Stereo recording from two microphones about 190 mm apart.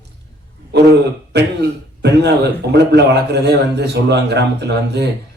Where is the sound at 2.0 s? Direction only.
60° right (ahead or behind).